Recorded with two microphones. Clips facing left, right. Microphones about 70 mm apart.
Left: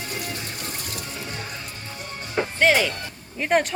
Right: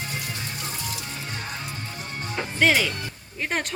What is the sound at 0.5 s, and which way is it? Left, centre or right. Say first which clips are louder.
Music: even; left.